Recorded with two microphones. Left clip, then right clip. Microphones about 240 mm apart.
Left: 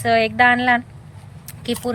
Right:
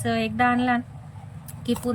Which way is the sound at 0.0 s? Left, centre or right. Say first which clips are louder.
Left 8 dB; centre.